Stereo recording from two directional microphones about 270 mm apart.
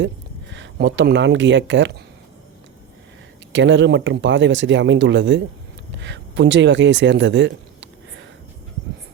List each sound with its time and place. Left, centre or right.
0.5 s speech: right
3.5 s speech: right